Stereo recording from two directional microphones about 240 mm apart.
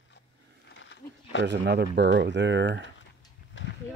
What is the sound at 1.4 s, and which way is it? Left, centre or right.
Speech, right.